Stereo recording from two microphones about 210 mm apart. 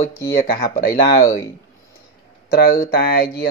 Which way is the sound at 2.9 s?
50° left (ahead or behind).